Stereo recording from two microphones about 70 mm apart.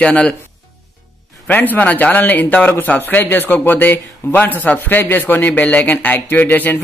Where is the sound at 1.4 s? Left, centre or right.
Left.